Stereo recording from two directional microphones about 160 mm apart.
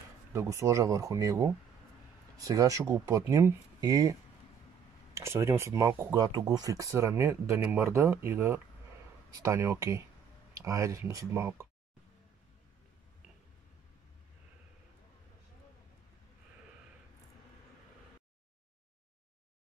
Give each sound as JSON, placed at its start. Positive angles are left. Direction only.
{"t": 0.3, "sound": "speech", "side_deg": -20}